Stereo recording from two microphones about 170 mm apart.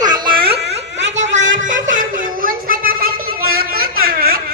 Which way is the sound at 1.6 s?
50° right (ahead or behind).